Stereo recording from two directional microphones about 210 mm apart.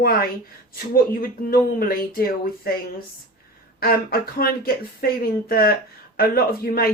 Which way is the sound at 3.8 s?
45° left (ahead or behind).